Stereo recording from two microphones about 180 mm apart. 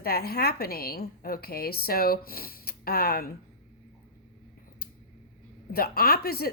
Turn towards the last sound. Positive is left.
turn(degrees=60)  # may be behind; listen again after turning